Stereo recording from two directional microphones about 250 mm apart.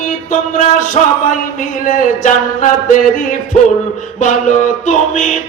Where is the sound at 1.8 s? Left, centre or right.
Left.